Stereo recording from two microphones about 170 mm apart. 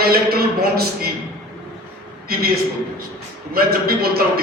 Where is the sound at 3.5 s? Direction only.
60° right (ahead or behind).